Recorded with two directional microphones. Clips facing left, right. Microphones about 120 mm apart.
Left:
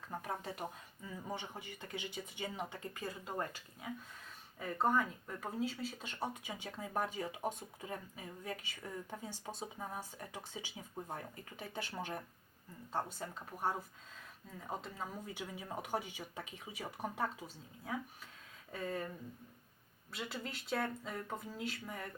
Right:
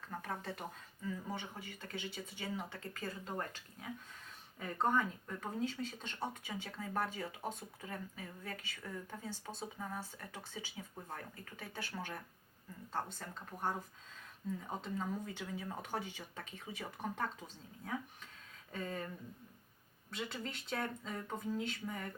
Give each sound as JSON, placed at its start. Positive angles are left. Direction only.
{"t": 0.1, "sound": "speech", "side_deg": 15}
{"t": 4.6, "sound": "speech", "side_deg": 5}
{"t": 20.1, "sound": "speech", "side_deg": 5}